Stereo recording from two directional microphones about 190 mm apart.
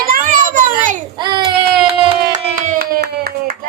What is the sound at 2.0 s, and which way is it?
Clapping, 40° right (ahead or behind).